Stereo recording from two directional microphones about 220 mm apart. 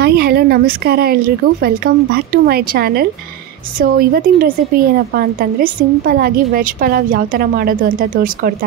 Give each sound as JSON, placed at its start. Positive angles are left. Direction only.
{"t": 0.0, "sound": "speech", "side_deg": -45}